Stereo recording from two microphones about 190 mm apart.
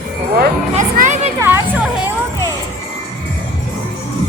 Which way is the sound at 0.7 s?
40° right (ahead or behind).